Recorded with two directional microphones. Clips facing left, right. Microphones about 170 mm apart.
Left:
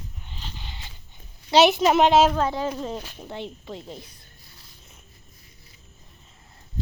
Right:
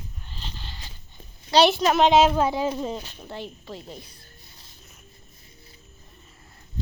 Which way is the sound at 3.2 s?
15° left (ahead or behind).